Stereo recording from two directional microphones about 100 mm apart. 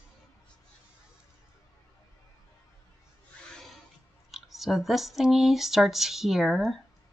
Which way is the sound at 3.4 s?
5° left (ahead or behind).